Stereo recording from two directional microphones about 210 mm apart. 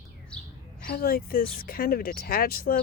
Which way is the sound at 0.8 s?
45° left (ahead or behind).